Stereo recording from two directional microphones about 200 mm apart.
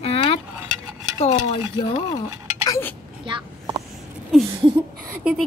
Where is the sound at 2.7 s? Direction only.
10° left (ahead or behind).